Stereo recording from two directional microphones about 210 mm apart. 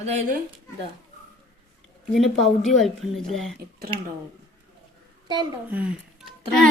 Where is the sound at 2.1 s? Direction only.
Centre (ahead or behind).